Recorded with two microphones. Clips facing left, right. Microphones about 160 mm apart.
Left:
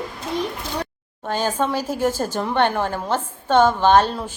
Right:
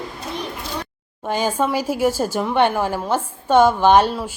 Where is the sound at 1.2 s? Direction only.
10° right (ahead or behind).